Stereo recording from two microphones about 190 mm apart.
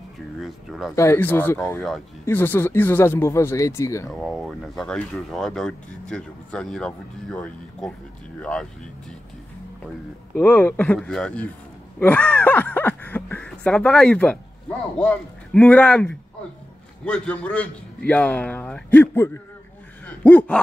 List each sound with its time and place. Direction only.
0.4 s speech: centre (ahead or behind)
0.9 s a man's voice: 15° left (ahead or behind)
4.1 s speech: centre (ahead or behind)
10.3 s a man's voice: 10° left (ahead or behind)